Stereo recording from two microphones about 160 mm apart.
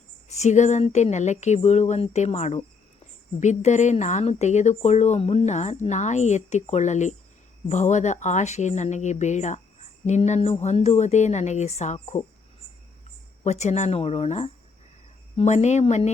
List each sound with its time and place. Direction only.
0.3 s speech: 45° left (ahead or behind)
13.4 s speech: 45° left (ahead or behind)